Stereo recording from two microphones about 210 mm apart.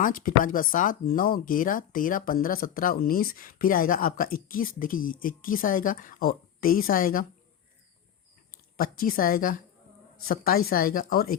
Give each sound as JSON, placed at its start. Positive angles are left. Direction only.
{"t": 0.0, "sound": "speech", "side_deg": 40}
{"t": 8.7, "sound": "a woman's voice", "side_deg": 45}